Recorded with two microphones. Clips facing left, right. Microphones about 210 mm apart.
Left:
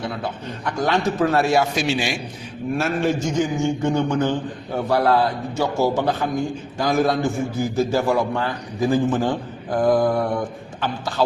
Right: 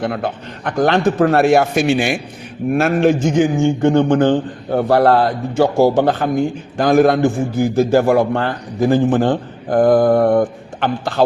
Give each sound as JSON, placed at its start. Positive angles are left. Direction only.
{"t": 0.0, "sound": "a man's voice", "side_deg": -55}